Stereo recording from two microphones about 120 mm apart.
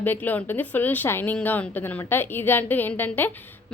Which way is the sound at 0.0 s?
15° left (ahead or behind).